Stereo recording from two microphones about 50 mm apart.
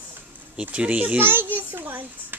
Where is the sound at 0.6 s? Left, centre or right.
Right.